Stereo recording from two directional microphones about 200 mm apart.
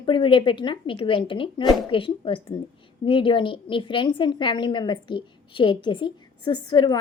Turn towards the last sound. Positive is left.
turn(degrees=20)  # may be behind; listen again after turning